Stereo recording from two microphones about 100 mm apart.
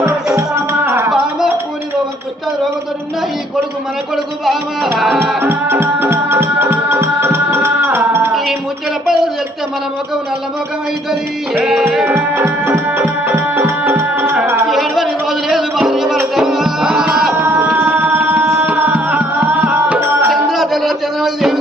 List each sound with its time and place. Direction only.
0.0 s music: 30° right (ahead or behind)
4.9 s music: centre (ahead or behind)
5.4 s music: 20° right (ahead or behind)
11.6 s music: 5° right (ahead or behind)
12.0 s music: 20° right (ahead or behind)
14.7 s music: centre (ahead or behind)
17.4 s music: 20° right (ahead or behind)
18.6 s tabla: 15° right (ahead or behind)
20.3 s a sound: centre (ahead or behind)